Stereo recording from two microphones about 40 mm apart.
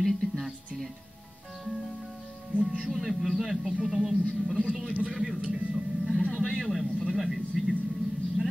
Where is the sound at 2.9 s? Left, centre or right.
Centre.